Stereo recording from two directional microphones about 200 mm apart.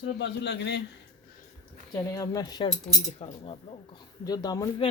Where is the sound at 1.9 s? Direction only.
15° left (ahead or behind).